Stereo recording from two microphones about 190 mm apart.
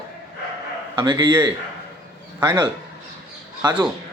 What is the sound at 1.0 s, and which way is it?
Speech, 25° right (ahead or behind).